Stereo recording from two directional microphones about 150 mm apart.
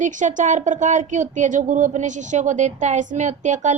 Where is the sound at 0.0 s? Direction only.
55° right (ahead or behind).